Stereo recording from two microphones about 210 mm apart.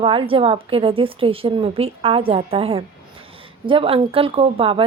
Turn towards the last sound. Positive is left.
turn(degrees=-25)  # may be behind; listen again after turning